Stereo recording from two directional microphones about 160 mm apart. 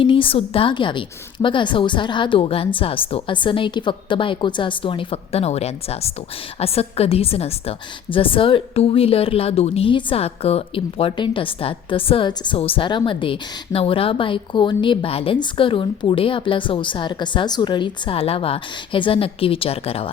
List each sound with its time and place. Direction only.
0.0 s a woman's voice: 35° left (ahead or behind)